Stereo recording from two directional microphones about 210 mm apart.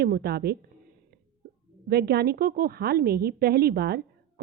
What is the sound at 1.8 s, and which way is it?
A woman's voice, 50° right (ahead or behind).